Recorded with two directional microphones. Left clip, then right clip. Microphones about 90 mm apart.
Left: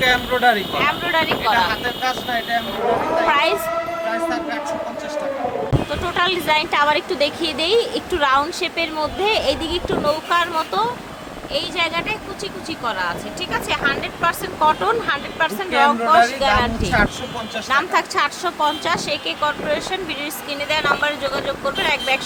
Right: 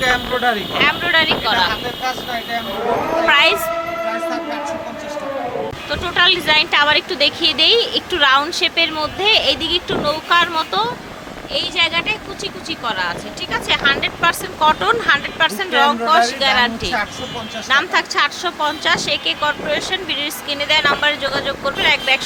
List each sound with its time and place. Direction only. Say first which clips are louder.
0.0 s speech: left 1 dB; 35° left (ahead or behind)
0.8 s a woman's voice: right 4 dB; centre (ahead or behind)
3.2 s a woman's voice: right 6 dB; 5° left (ahead or behind)
5.9 s a woman's voice: right 7 dB; 5° left (ahead or behind)
17.7 s a woman's voice: right 3 dB; 5° left (ahead or behind)